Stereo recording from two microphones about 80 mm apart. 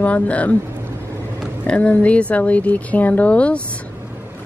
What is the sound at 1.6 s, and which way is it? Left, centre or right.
Speech, centre.